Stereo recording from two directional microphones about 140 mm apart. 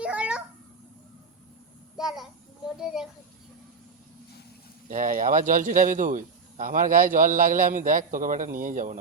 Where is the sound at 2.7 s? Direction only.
5° right (ahead or behind).